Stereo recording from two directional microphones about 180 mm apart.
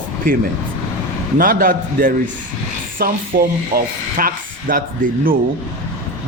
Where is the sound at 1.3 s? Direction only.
50° right (ahead or behind).